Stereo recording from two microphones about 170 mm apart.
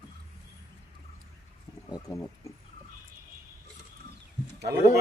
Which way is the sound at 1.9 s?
20° left (ahead or behind).